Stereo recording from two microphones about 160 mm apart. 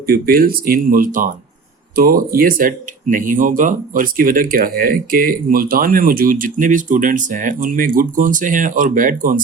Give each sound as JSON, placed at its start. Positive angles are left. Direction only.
{"t": 0.1, "sound": "speech", "side_deg": -65}